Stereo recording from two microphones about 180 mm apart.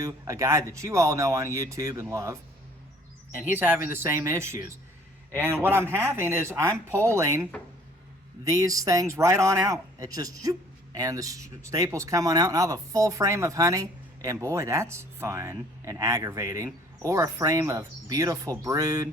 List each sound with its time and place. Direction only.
0.0 s speech: 15° right (ahead or behind)
3.4 s speech: 10° right (ahead or behind)
5.6 s speech: 15° right (ahead or behind)
8.4 s speech: 20° right (ahead or behind)